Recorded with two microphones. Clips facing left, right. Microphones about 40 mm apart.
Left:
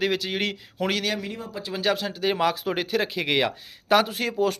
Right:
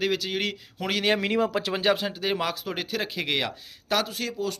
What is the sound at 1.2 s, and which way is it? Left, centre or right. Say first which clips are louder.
Speech: right 9 dB; right.